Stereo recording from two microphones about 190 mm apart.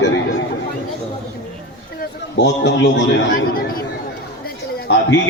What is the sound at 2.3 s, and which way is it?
A man's voice, 65° left (ahead or behind).